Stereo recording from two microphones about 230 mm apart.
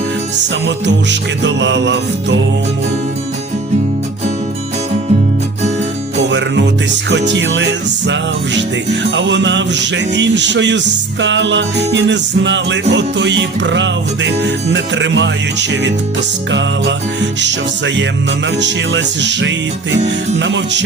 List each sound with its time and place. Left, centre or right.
0.9 s music: right
7.3 s music: right